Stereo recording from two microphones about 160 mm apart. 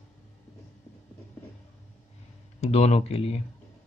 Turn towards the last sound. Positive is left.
turn(degrees=40)  # may be behind; listen again after turning